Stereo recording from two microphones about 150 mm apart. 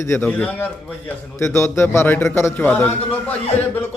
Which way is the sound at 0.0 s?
15° left (ahead or behind).